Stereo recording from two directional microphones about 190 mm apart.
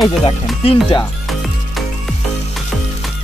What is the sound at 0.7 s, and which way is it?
Speech, 30° left (ahead or behind).